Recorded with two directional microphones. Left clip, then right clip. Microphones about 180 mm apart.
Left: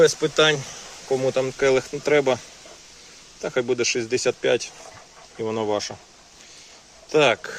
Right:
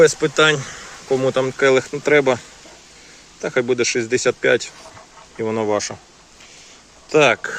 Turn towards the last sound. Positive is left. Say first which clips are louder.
# right 4 dB
turn(degrees=5)  # may be behind; listen again after turning